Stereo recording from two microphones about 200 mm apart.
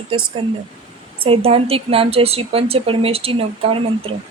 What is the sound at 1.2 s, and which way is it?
A woman's voice, 30° right (ahead or behind).